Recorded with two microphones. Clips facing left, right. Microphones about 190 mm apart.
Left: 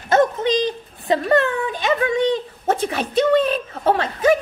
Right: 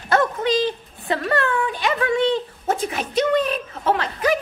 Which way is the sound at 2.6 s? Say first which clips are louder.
Left 3 dB; 30° left (ahead or behind).